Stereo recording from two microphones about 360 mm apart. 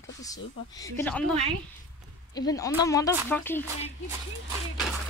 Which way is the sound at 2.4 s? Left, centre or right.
Centre.